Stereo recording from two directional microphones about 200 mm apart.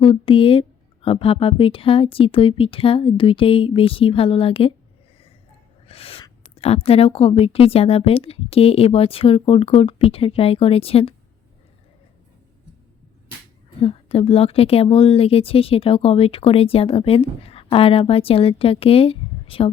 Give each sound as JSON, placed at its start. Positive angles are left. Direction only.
{"t": 0.0, "sound": "speech", "side_deg": 25}
{"t": 5.9, "sound": "speech", "side_deg": 30}
{"t": 13.8, "sound": "speech", "side_deg": 30}